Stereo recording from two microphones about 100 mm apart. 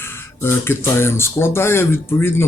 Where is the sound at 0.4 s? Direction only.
25° left (ahead or behind).